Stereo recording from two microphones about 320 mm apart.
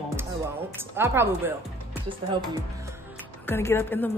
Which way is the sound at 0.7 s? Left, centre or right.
Centre.